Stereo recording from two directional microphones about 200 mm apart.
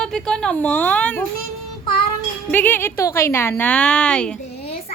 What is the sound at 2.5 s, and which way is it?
Speech, 10° left (ahead or behind).